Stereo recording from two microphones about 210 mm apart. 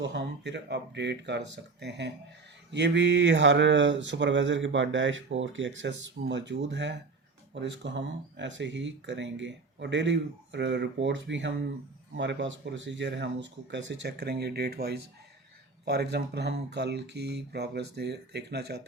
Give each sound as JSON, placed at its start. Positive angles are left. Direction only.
{"t": 0.0, "sound": "speech", "side_deg": -55}